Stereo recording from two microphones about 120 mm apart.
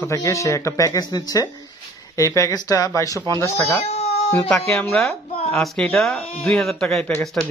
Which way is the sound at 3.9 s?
60° left (ahead or behind).